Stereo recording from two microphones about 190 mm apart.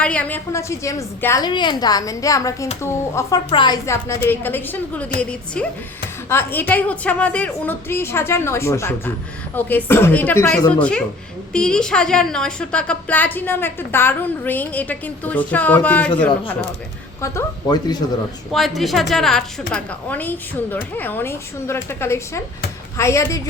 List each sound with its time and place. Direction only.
0.0 s a woman's voice: 5° left (ahead or behind)
18.5 s a woman's voice: centre (ahead or behind)